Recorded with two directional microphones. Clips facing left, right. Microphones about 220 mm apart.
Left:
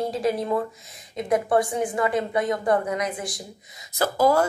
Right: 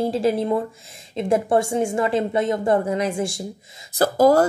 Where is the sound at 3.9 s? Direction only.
40° right (ahead or behind).